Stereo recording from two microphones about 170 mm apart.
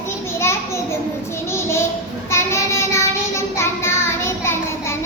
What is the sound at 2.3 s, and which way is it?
Child singing, 15° left (ahead or behind).